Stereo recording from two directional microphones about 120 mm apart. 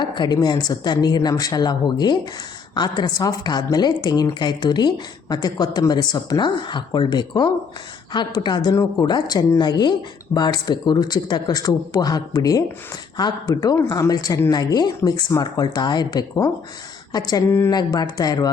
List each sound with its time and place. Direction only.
0.0 s a woman's voice: 40° left (ahead or behind)